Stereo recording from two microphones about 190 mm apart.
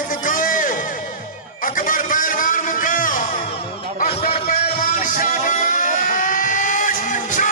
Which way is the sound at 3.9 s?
35° left (ahead or behind).